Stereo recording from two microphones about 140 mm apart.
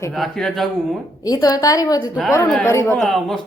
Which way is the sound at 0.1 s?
Centre (ahead or behind).